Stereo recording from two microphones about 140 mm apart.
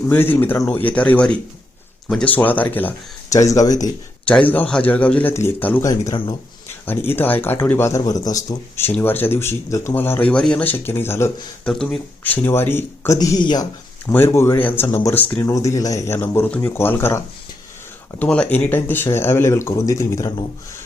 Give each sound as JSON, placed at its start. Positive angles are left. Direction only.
{"t": 0.1, "sound": "speech", "side_deg": 15}
{"t": 3.2, "sound": "speech", "side_deg": 25}
{"t": 4.3, "sound": "speech", "side_deg": 10}
{"t": 5.8, "sound": "speech", "side_deg": 25}
{"t": 11.7, "sound": "speech", "side_deg": 5}
{"t": 13.1, "sound": "speech", "side_deg": 30}
{"t": 14.1, "sound": "speech", "side_deg": 20}